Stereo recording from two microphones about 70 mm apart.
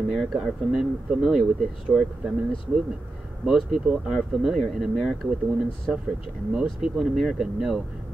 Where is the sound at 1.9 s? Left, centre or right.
Centre.